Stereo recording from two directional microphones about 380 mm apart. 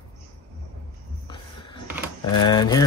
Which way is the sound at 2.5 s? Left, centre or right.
Centre.